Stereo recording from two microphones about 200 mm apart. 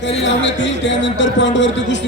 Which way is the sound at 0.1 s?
65° left (ahead or behind).